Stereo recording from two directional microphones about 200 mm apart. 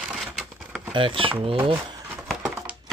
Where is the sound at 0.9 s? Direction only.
25° right (ahead or behind).